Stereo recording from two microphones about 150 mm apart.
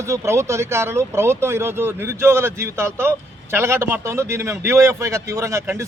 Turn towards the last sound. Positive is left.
turn(degrees=-20)  # may be behind; listen again after turning